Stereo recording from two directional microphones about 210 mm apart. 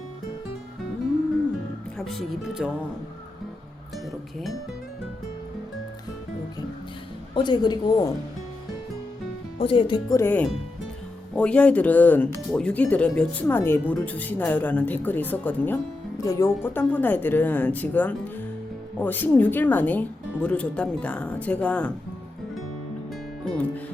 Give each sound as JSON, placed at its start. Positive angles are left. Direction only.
{"t": 2.0, "sound": "speech", "side_deg": 0}
{"t": 3.9, "sound": "music", "side_deg": 0}
{"t": 7.3, "sound": "speech", "side_deg": 20}
{"t": 9.6, "sound": "speech", "side_deg": 25}